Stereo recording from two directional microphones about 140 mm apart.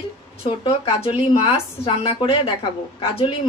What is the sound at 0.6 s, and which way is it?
A woman's voice, 40° left (ahead or behind).